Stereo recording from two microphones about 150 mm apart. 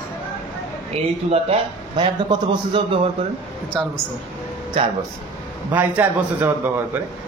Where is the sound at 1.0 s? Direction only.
40° right (ahead or behind).